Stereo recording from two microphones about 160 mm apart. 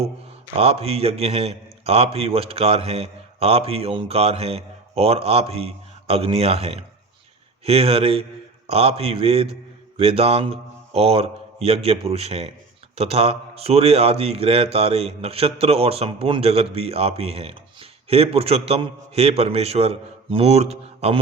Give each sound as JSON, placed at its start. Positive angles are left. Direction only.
{"t": 0.5, "sound": "a man's voice", "side_deg": -40}